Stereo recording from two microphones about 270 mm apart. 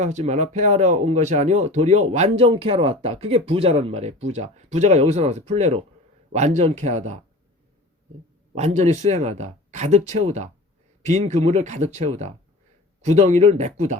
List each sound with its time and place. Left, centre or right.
0.0 s speech: right
8.5 s speech: right